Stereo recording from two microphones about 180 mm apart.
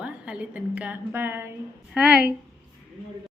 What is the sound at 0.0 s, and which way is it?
A woman's voice, 5° right (ahead or behind).